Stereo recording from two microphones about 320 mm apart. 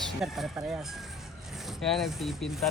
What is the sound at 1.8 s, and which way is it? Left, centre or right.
Speech, centre.